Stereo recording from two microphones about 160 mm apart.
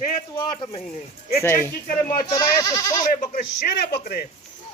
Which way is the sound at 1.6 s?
60° left (ahead or behind).